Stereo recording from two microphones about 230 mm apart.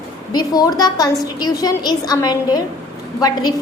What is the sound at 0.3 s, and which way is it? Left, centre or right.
A woman's voice, centre.